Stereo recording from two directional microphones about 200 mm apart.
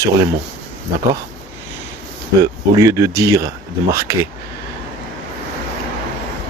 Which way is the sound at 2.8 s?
15° right (ahead or behind).